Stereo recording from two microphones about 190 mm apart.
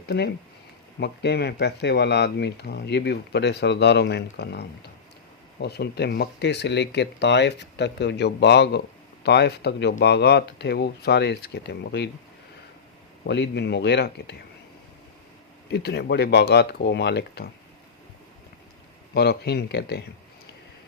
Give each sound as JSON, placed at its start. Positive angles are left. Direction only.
{"t": 0.9, "sound": "speech", "side_deg": 60}
{"t": 13.2, "sound": "speech", "side_deg": 65}
{"t": 15.7, "sound": "speech", "side_deg": 60}
{"t": 19.1, "sound": "speech", "side_deg": 60}